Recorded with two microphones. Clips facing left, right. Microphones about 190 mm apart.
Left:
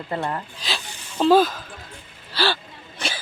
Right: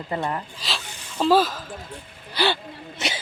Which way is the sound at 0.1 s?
15° right (ahead or behind).